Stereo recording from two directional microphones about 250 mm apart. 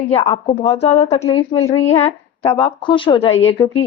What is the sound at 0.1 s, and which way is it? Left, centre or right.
A woman's voice, left.